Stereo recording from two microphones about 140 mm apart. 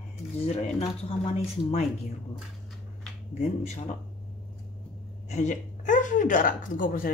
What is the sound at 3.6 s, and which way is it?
Speech, 55° left (ahead or behind).